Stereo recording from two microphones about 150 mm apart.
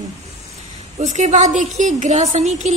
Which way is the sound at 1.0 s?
50° right (ahead or behind).